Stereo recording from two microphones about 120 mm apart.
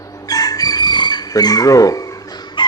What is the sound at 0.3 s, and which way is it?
Chicken, 30° left (ahead or behind).